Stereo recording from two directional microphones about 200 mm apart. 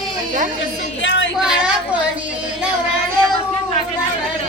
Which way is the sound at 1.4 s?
5° right (ahead or behind).